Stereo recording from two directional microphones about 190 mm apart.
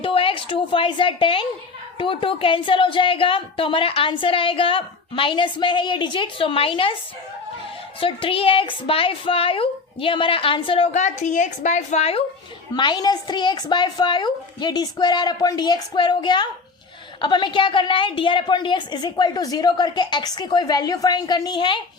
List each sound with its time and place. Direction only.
0.0 s a woman's voice: 30° left (ahead or behind)
8.0 s a woman's voice: 30° left (ahead or behind)